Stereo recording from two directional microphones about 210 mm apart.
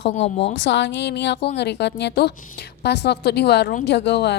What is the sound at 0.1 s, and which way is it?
Speech, 30° left (ahead or behind).